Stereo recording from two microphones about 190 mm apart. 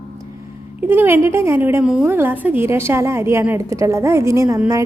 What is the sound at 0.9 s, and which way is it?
A woman's voice, 10° right (ahead or behind).